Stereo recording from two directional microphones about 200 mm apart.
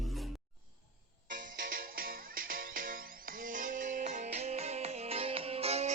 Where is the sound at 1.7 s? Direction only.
45° right (ahead or behind).